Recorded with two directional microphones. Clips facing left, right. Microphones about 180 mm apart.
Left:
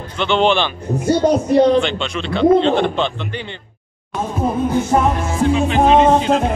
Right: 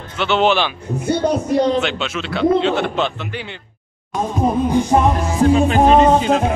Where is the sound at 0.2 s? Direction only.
5° right (ahead or behind).